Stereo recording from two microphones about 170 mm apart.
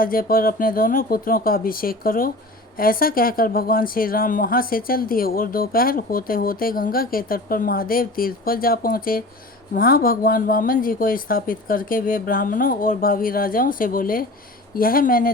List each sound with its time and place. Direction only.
0.0 s speech: 55° left (ahead or behind)